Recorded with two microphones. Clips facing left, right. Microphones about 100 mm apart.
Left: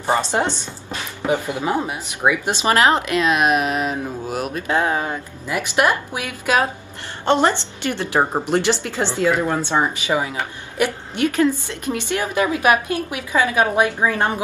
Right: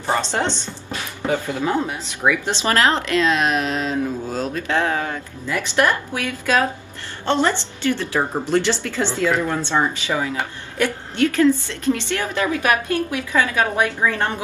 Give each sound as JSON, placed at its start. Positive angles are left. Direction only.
{"t": 0.0, "sound": "a woman's voice", "side_deg": 15}